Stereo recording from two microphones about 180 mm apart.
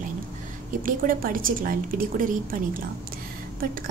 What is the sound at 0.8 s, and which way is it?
A woman's voice, 50° right (ahead or behind).